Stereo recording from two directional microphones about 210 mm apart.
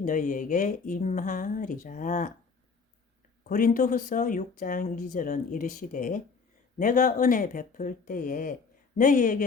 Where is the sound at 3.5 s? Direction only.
40° left (ahead or behind).